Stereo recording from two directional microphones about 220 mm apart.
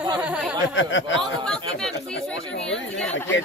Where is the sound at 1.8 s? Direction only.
Centre (ahead or behind).